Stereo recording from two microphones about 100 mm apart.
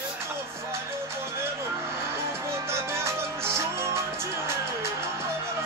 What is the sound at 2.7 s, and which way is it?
Music, 25° right (ahead or behind).